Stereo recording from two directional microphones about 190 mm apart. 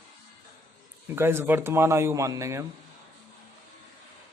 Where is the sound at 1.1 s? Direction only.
10° right (ahead or behind).